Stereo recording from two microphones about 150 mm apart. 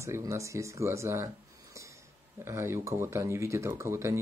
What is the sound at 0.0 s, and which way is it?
Speech, 20° right (ahead or behind).